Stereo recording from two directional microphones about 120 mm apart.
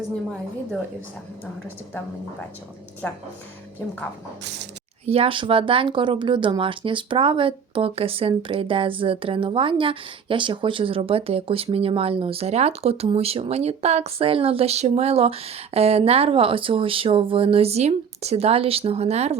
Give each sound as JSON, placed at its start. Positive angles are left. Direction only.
{"t": 5.0, "sound": "speech", "side_deg": -55}